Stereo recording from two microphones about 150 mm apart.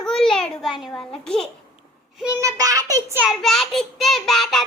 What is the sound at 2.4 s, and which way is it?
Speech, 25° right (ahead or behind).